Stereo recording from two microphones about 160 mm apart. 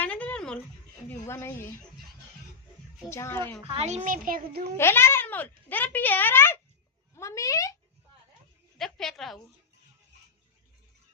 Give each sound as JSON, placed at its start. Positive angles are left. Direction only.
{"t": 0.0, "sound": "a sound", "side_deg": 10}
{"t": 1.3, "sound": "a child's voice", "side_deg": 15}
{"t": 3.1, "sound": "a child's voice", "side_deg": 15}
{"t": 3.7, "sound": "a child's voice", "side_deg": -40}
{"t": 4.8, "sound": "a child's voice", "side_deg": 15}
{"t": 8.8, "sound": "a woman's voice", "side_deg": 0}